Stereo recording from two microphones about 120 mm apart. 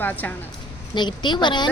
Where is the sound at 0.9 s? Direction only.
40° left (ahead or behind).